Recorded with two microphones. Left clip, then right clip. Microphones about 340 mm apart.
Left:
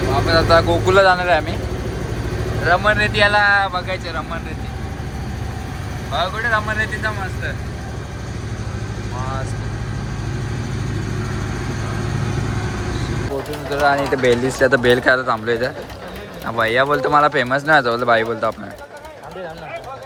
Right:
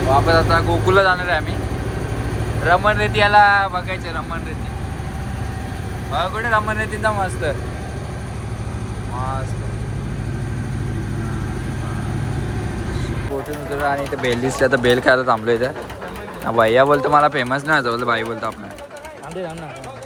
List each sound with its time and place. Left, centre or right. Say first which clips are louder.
0.3 s speech: left 2 dB; centre
2.6 s speech: even; centre
6.1 s speech: even; centre
13.7 s speech: left 5 dB; left
14.5 s speech: left 1 dB; centre